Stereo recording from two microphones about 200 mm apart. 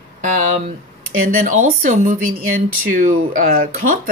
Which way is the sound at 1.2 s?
45° right (ahead or behind).